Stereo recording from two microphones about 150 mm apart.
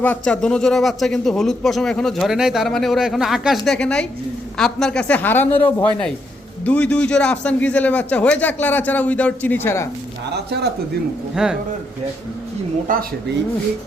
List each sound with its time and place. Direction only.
0.0 s a man's voice: 10° left (ahead or behind)
10.3 s speech: 90° right
11.4 s a man's voice: 5° right (ahead or behind)